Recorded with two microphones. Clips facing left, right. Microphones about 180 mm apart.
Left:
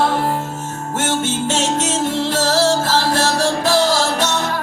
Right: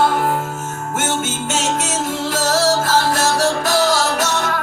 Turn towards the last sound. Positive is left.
turn(degrees=30)  # may be behind; listen again after turning